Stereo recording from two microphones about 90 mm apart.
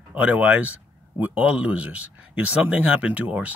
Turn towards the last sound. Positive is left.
turn(degrees=-15)  # may be behind; listen again after turning